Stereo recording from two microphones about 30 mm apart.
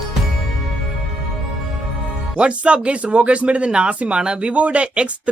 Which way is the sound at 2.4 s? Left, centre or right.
Right.